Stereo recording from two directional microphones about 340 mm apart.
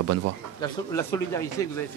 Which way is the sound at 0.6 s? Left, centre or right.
Centre.